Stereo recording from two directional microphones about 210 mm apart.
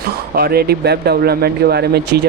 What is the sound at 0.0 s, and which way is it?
Speech, 50° right (ahead or behind).